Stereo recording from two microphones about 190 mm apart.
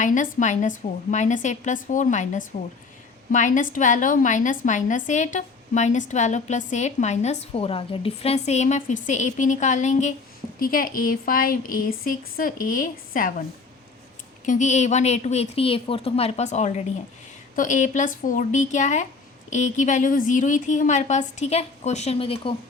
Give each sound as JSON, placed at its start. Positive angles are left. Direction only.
{"t": 0.0, "sound": "a woman's voice", "side_deg": 40}
{"t": 14.4, "sound": "a woman's voice", "side_deg": 40}